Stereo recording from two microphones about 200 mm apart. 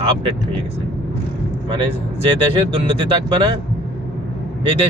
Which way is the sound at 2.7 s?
25° right (ahead or behind).